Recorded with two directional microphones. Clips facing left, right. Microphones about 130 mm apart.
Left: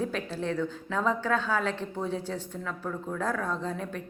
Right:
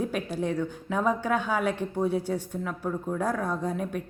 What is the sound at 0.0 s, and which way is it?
A woman's voice, 15° right (ahead or behind).